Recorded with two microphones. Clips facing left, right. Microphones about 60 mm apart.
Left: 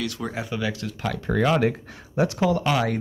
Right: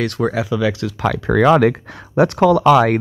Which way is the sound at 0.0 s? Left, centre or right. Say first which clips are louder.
Right 10 dB; right.